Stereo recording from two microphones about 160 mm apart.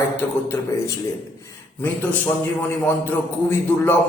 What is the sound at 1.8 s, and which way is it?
Speech, 10° left (ahead or behind).